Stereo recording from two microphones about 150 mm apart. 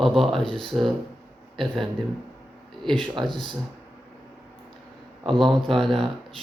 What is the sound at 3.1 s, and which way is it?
Speech, 30° right (ahead or behind).